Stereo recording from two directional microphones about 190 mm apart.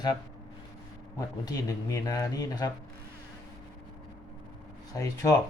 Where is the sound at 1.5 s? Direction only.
20° left (ahead or behind).